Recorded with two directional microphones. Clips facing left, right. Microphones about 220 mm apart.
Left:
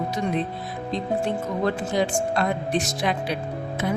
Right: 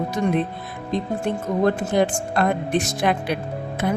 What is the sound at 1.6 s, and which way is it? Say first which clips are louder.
A woman's voice: right 5 dB; 55° right (ahead or behind).